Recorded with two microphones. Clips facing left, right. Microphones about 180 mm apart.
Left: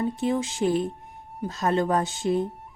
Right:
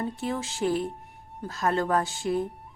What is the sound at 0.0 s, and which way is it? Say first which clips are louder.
A woman's voice: left 5 dB; 20° left (ahead or behind).